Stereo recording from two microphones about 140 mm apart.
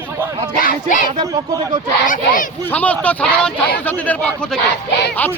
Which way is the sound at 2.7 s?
10° left (ahead or behind).